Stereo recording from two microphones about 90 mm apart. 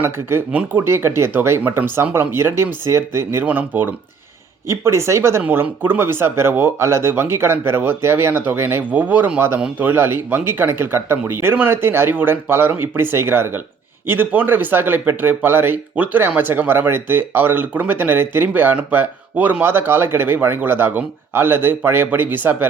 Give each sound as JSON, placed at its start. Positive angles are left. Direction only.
{"t": 0.0, "sound": "speech", "side_deg": -25}
{"t": 3.4, "sound": "speech", "side_deg": -15}
{"t": 4.7, "sound": "speech", "side_deg": -30}